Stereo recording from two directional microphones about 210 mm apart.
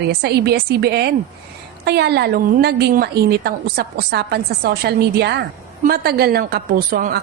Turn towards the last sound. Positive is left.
turn(degrees=-45)  # may be behind; listen again after turning